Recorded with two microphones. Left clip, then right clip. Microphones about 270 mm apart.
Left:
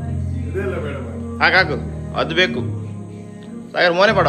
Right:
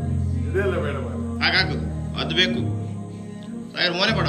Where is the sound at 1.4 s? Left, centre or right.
Centre.